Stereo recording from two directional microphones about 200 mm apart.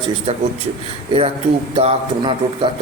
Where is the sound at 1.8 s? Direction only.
30° right (ahead or behind).